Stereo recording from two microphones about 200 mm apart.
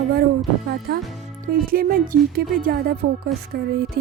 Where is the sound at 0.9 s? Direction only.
55° right (ahead or behind).